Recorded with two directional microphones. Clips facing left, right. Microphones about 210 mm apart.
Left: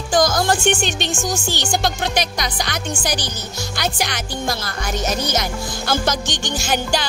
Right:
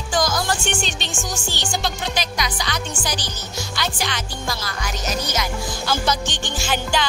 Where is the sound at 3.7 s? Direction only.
45° left (ahead or behind).